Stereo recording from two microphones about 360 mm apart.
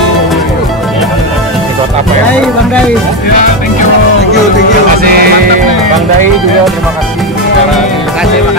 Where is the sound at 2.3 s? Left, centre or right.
Centre.